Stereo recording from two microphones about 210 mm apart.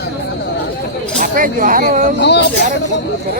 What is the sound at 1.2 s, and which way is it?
Speech, 40° right (ahead or behind).